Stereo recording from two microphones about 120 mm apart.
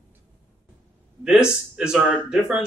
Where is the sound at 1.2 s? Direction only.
5° right (ahead or behind).